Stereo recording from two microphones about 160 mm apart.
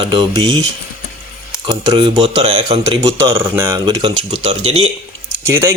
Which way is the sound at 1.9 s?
35° right (ahead or behind).